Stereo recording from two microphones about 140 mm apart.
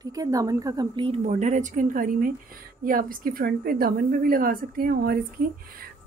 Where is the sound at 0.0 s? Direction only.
25° right (ahead or behind).